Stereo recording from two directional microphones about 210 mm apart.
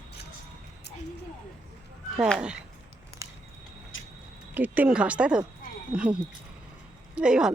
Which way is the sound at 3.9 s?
65° left (ahead or behind).